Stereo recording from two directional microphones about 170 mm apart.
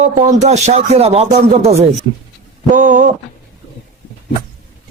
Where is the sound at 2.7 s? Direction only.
50° right (ahead or behind).